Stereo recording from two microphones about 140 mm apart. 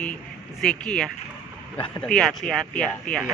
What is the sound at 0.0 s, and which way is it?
Speech, 5° left (ahead or behind).